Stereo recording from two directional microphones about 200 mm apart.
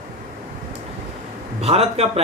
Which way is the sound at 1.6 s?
30° right (ahead or behind).